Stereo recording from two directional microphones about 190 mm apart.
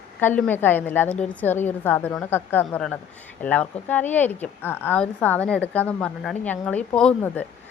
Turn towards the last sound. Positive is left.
turn(degrees=5)  # may be behind; listen again after turning